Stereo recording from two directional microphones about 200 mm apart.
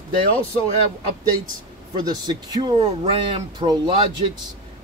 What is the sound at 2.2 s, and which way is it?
Speech, 20° right (ahead or behind).